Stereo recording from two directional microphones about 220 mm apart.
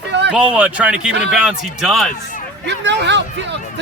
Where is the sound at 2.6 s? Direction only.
50° right (ahead or behind).